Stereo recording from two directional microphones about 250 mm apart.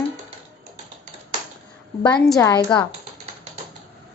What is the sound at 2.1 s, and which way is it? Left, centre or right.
Speech, centre.